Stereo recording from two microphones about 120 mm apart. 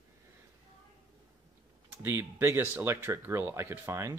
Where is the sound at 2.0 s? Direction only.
20° right (ahead or behind).